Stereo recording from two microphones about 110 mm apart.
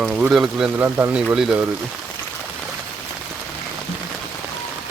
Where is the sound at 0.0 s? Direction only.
10° right (ahead or behind).